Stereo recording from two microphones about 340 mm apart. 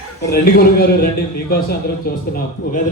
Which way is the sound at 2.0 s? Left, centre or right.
Left.